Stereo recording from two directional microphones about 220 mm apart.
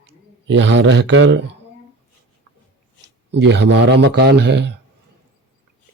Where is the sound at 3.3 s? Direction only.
50° right (ahead or behind).